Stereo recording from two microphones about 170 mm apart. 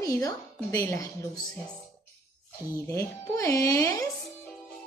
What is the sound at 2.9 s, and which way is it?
A woman's voice, 20° left (ahead or behind).